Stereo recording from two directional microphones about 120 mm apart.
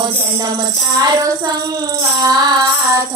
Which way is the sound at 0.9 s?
35° right (ahead or behind).